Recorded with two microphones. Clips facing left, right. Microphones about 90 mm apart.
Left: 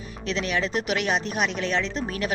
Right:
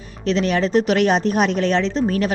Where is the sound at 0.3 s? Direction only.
40° right (ahead or behind).